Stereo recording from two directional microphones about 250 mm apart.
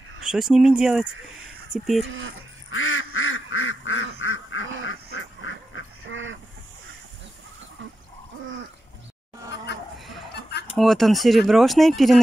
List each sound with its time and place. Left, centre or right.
0.2 s speech: centre
2.0 s speech: right
2.7 s quack: left
6.0 s duck: right
9.9 s a sound: centre
10.8 s speech: centre